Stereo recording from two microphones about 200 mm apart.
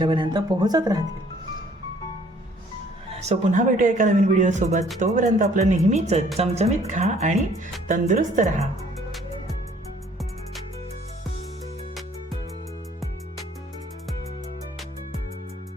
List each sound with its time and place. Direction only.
0.0 s speech: 25° right (ahead or behind)
3.1 s speech: 35° right (ahead or behind)